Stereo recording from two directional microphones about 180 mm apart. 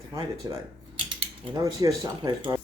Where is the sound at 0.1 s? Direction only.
20° right (ahead or behind).